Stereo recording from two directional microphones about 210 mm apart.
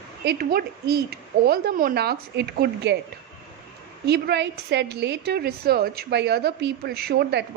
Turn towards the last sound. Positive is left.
turn(degrees=-50)  # may be behind; listen again after turning